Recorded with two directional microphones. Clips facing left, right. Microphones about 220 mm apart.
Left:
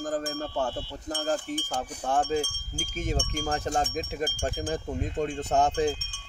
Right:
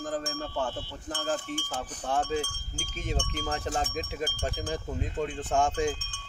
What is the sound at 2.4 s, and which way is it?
Speech, 10° left (ahead or behind).